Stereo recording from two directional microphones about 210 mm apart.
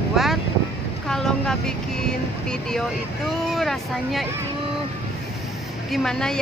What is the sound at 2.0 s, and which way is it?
Speech, 5° left (ahead or behind).